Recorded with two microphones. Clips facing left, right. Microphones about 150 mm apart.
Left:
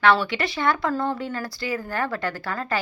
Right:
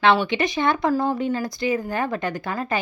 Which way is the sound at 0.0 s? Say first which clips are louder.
Right 2 dB; 20° right (ahead or behind).